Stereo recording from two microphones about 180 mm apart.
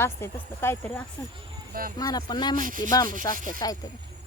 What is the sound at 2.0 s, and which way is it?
Speech, 25° left (ahead or behind).